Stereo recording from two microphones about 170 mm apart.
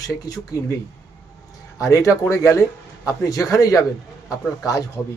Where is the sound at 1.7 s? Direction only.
20° left (ahead or behind).